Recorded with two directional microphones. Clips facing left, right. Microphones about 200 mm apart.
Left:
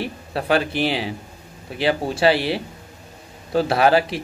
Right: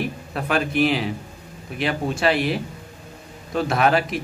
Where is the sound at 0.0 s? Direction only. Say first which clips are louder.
Left 1 dB; 30° left (ahead or behind).